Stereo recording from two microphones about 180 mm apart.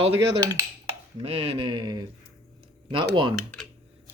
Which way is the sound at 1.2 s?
35° right (ahead or behind).